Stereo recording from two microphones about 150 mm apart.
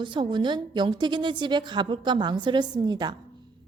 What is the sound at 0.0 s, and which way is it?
A woman's voice, 30° right (ahead or behind).